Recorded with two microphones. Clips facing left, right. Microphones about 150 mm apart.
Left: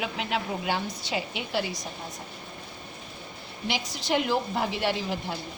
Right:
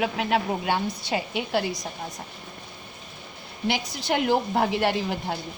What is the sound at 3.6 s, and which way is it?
A woman's voice, 55° right (ahead or behind).